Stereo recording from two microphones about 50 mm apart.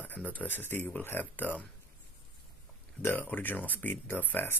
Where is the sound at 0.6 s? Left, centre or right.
Left.